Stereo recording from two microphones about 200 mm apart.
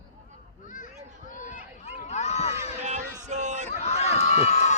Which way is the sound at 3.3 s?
35° right (ahead or behind).